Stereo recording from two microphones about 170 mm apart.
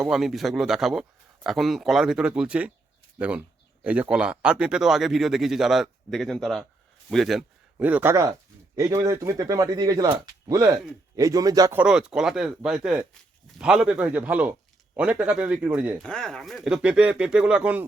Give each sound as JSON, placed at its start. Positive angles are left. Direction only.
{"t": 0.0, "sound": "speech", "side_deg": 0}
{"t": 11.7, "sound": "speech", "side_deg": -5}
{"t": 16.0, "sound": "speech", "side_deg": 5}